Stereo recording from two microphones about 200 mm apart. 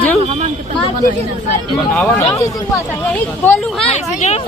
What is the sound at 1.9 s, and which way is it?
Speech, 5° left (ahead or behind).